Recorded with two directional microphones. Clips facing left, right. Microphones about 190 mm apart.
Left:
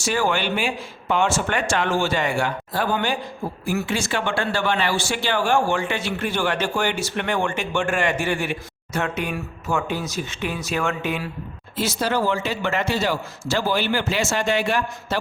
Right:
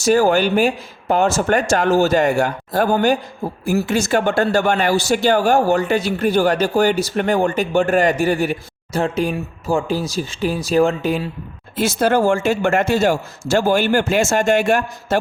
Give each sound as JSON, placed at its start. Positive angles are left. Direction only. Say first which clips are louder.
{"t": 0.0, "sound": "speech", "louder": "right 8 dB", "side_deg": -40}
{"t": 11.8, "sound": "a man's voice", "louder": "right 7 dB", "side_deg": -50}